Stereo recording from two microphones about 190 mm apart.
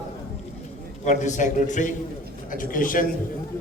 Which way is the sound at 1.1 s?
40° left (ahead or behind).